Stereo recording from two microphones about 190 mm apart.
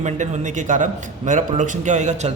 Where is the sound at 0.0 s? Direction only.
40° right (ahead or behind).